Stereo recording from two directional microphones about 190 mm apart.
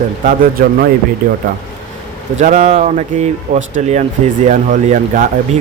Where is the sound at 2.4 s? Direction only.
40° right (ahead or behind).